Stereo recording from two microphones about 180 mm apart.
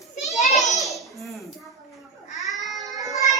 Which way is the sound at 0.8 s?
Centre (ahead or behind).